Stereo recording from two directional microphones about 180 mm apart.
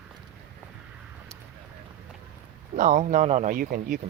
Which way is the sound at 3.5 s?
55° right (ahead or behind).